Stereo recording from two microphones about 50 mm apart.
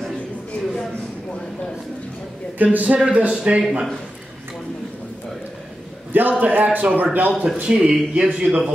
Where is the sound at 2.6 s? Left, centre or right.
Right.